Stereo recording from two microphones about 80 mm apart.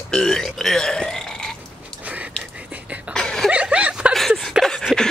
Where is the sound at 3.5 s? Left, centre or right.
Centre.